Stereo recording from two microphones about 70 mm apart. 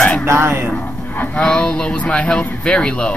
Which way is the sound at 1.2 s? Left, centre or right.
Centre.